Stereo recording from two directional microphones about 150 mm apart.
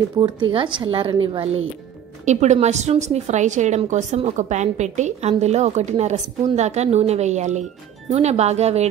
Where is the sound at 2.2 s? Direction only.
50° right (ahead or behind).